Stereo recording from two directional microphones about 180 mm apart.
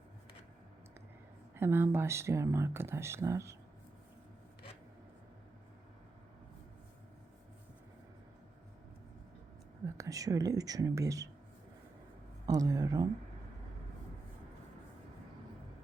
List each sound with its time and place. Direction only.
1.5 s speech: 10° right (ahead or behind)
9.8 s speech: 20° right (ahead or behind)
12.5 s speech: 20° right (ahead or behind)